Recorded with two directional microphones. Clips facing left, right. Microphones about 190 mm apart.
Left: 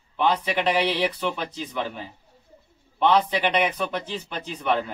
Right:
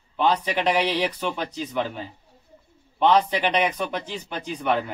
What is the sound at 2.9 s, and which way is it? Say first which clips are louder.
A man's voice: right 1 dB; 10° right (ahead or behind).